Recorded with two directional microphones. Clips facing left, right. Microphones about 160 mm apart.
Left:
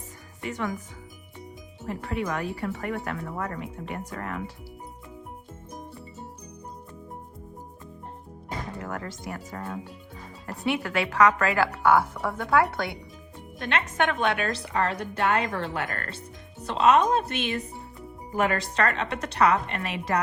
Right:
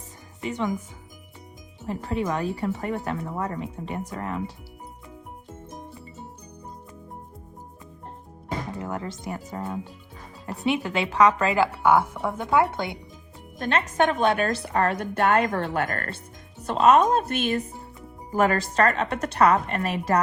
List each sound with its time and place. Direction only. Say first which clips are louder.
0.4 s speech: right 3 dB; 20° right (ahead or behind)
1.9 s speech: right 3 dB; 30° right (ahead or behind)
8.8 s speech: right 3 dB; 20° right (ahead or behind)
13.6 s a woman's voice: right 4 dB; 40° right (ahead or behind)